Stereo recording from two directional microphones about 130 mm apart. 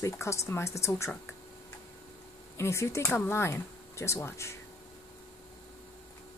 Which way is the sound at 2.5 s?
20° left (ahead or behind).